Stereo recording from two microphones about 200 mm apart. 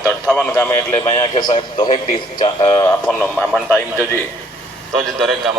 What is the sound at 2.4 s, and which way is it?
Speech, 20° left (ahead or behind).